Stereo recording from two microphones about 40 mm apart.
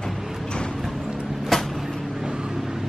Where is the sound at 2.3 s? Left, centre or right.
Centre.